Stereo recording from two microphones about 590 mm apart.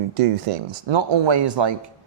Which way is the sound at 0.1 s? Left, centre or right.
Right.